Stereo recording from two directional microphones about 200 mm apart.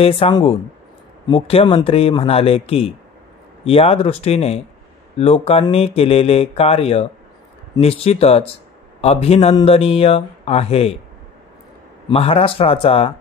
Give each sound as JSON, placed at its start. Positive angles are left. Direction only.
{"t": 0.0, "sound": "speech", "side_deg": 30}
{"t": 12.1, "sound": "speech", "side_deg": 30}